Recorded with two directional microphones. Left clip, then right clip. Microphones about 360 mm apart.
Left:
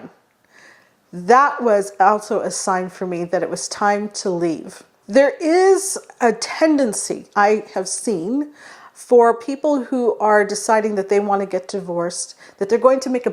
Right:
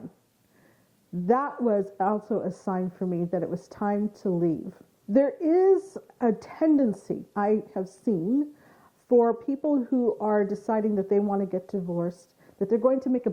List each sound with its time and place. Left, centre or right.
1.3 s a woman's voice: centre
8.1 s a woman's voice: centre